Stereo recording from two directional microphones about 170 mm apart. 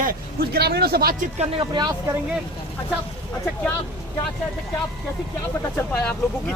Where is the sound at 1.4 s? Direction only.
30° right (ahead or behind).